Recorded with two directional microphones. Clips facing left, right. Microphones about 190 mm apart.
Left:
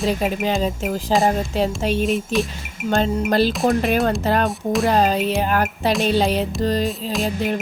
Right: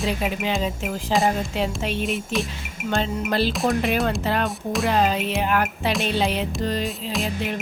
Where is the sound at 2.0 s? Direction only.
Centre (ahead or behind).